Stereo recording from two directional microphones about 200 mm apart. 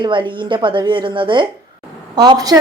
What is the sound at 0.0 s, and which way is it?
A woman's voice, 25° right (ahead or behind).